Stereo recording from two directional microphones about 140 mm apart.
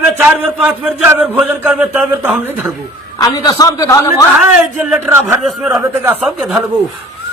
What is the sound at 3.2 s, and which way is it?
Speech, 25° left (ahead or behind).